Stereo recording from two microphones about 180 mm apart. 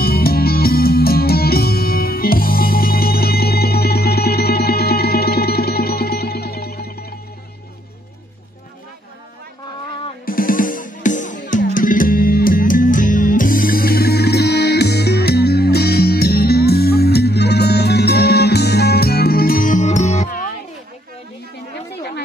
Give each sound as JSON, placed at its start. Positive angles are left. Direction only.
{"t": 0.0, "sound": "music", "side_deg": 55}
{"t": 10.2, "sound": "music", "side_deg": 50}